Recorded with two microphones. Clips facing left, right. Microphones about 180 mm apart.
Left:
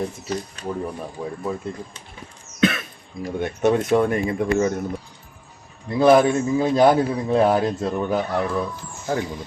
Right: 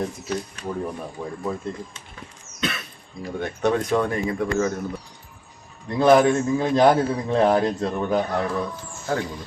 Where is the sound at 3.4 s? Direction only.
20° left (ahead or behind).